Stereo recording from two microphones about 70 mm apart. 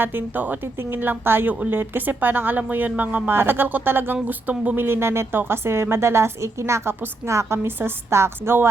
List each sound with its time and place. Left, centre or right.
0.0 s speech: right